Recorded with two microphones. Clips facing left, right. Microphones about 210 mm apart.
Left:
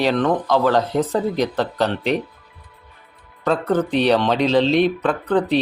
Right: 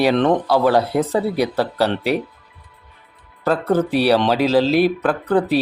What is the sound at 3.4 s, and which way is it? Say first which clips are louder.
Speech: right 1 dB; 5° right (ahead or behind).